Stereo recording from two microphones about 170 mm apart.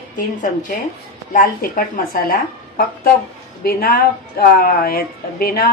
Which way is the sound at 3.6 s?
60° left (ahead or behind).